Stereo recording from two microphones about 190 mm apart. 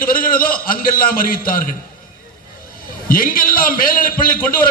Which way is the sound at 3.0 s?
50° left (ahead or behind).